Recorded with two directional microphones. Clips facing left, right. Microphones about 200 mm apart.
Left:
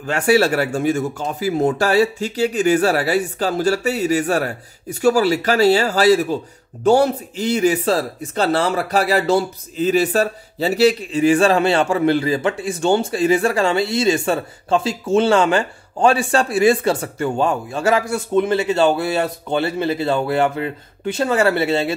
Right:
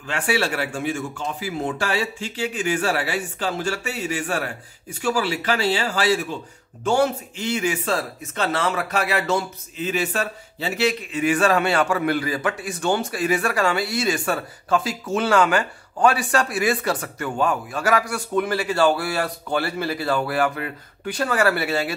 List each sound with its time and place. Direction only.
0.0 s a man's voice: 40° left (ahead or behind); by 21.9 s 25° left (ahead or behind)